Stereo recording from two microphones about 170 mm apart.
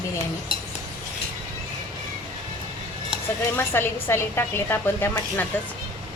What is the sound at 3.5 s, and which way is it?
A woman's voice, 15° left (ahead or behind).